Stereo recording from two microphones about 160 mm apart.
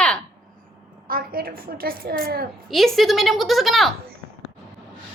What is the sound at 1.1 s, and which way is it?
A woman's voice, 65° right (ahead or behind).